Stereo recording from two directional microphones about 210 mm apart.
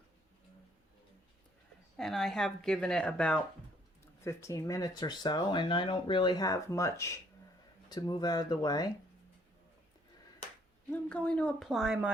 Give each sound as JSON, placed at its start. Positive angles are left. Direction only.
{"t": 2.0, "sound": "speech", "side_deg": 0}
{"t": 11.1, "sound": "speech", "side_deg": 5}